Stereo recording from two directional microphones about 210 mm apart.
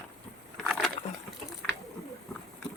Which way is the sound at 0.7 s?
Centre (ahead or behind).